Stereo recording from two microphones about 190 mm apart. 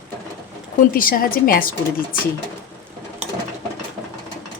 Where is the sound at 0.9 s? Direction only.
50° left (ahead or behind).